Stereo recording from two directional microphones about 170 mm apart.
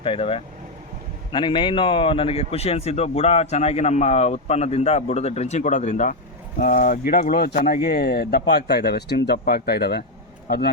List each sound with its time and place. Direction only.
0.0 s a man's voice: 30° left (ahead or behind); by 10.0 s 70° left (ahead or behind)